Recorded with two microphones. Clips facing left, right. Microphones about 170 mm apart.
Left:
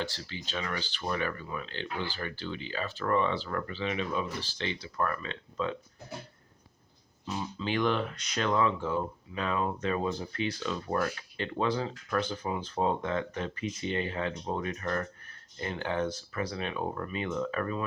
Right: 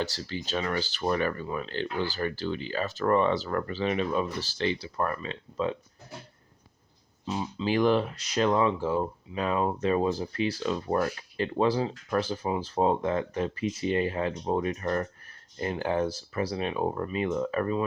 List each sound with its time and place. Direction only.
0.0 s speech: 40° right (ahead or behind)
7.3 s speech: 30° right (ahead or behind)